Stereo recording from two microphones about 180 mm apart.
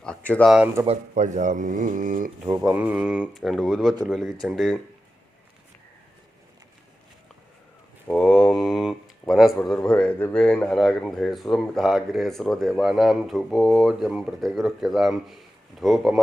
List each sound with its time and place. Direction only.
0.3 s speech: 5° left (ahead or behind)
0.5 s speech: 5° right (ahead or behind)
0.9 s speech: 45° right (ahead or behind)
2.6 s speech: 5° right (ahead or behind)
8.1 s a sound: 5° left (ahead or behind)
9.9 s speech: 5° left (ahead or behind)